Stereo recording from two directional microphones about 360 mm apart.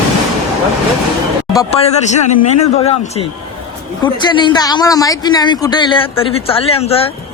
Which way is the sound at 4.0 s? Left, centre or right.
Centre.